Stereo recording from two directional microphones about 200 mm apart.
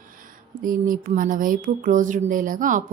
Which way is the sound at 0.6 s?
45° right (ahead or behind).